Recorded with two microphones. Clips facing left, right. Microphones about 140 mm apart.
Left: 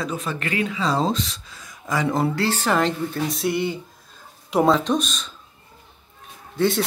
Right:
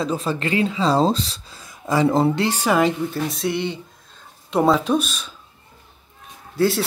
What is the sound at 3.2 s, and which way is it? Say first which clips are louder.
Speech: even; centre (ahead or behind).